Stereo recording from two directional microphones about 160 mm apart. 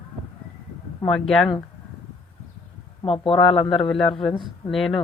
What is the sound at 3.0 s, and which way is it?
Speech, 35° left (ahead or behind).